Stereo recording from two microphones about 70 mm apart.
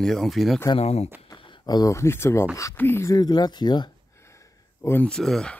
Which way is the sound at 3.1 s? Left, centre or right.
Left.